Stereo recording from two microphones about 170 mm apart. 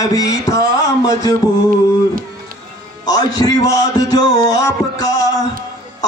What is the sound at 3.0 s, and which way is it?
Music, 25° left (ahead or behind).